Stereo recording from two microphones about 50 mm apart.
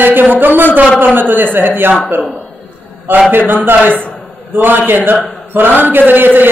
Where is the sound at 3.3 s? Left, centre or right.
Right.